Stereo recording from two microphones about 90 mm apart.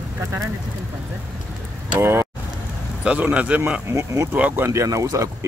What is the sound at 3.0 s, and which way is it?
Speech, 15° right (ahead or behind).